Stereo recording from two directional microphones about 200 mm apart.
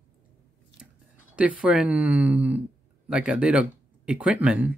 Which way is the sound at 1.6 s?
5° right (ahead or behind).